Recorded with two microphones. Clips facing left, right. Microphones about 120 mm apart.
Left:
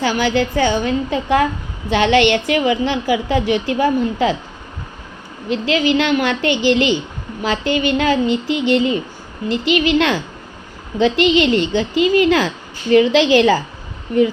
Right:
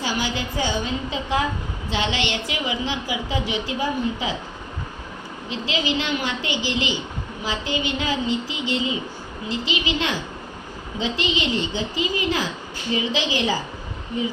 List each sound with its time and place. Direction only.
0.0 s a woman's voice: 65° left (ahead or behind)
5.5 s a woman's voice: 60° left (ahead or behind)